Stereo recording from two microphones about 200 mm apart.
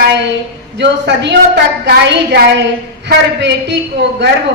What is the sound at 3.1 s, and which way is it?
Speech, 60° right (ahead or behind).